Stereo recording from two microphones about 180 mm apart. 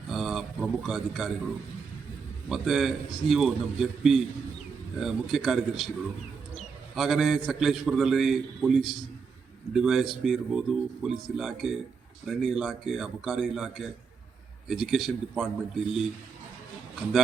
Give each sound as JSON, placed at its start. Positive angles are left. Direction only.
{"t": 0.1, "sound": "a sound", "side_deg": 0}
{"t": 2.5, "sound": "a man's voice", "side_deg": 0}
{"t": 6.9, "sound": "a man's voice", "side_deg": 0}